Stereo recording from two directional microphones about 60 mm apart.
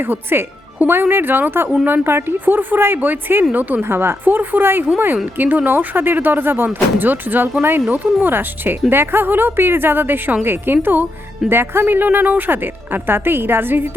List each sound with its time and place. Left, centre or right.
0.0 s speech: right